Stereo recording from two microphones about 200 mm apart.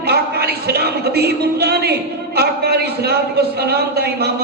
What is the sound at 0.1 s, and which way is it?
A man's voice, 55° right (ahead or behind).